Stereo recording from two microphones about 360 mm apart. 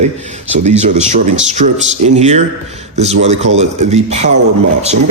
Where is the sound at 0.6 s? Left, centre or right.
Centre.